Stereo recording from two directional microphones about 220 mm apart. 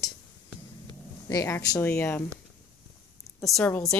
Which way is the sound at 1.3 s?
15° left (ahead or behind).